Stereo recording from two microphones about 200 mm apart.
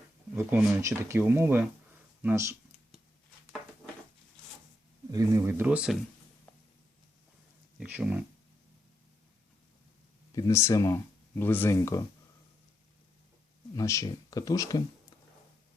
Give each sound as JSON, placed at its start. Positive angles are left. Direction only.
{"t": 0.3, "sound": "speech", "side_deg": -15}
{"t": 2.2, "sound": "computer keyboard", "side_deg": -15}
{"t": 5.1, "sound": "speech", "side_deg": -15}
{"t": 6.5, "sound": "a sound", "side_deg": 10}
{"t": 7.8, "sound": "speech", "side_deg": -5}
{"t": 10.3, "sound": "speech", "side_deg": 15}
{"t": 13.7, "sound": "speech", "side_deg": 15}